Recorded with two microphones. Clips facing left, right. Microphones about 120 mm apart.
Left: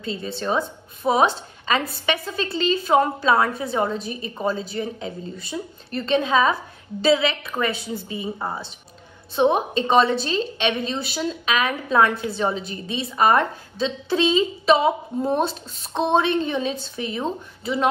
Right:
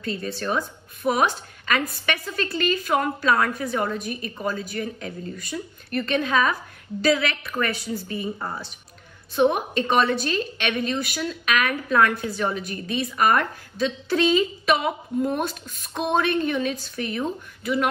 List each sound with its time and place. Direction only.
0.0 s a woman's voice: 20° left (ahead or behind)